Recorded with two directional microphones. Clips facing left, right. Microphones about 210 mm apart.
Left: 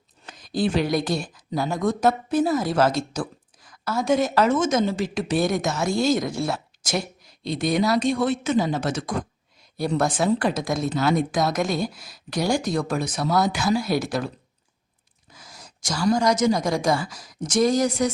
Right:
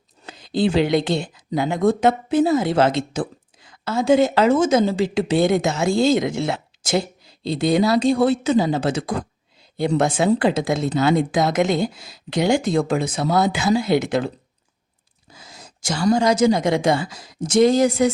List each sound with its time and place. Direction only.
0.3 s a woman's voice: 25° right (ahead or behind)
15.3 s a sound: 25° right (ahead or behind)
16.1 s a woman's voice: 25° right (ahead or behind)